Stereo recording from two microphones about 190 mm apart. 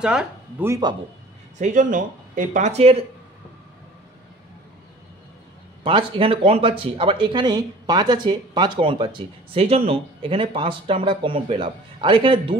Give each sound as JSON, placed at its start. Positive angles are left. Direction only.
{"t": 0.0, "sound": "speech", "side_deg": -5}
{"t": 0.7, "sound": "speech", "side_deg": -20}
{"t": 1.6, "sound": "speech", "side_deg": -40}
{"t": 5.9, "sound": "speech", "side_deg": -30}